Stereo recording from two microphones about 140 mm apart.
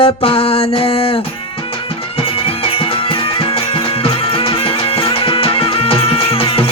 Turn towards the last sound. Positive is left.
turn(degrees=40)  # may be behind; listen again after turning